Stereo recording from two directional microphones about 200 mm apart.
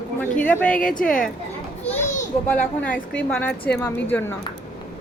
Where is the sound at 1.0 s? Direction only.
45° left (ahead or behind).